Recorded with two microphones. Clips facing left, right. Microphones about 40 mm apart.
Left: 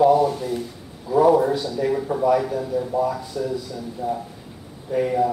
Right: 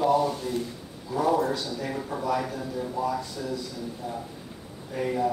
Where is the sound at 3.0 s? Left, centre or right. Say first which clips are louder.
Left 4 dB; centre.